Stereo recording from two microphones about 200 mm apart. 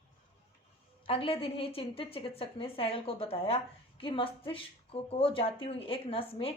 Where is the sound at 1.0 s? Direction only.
25° left (ahead or behind).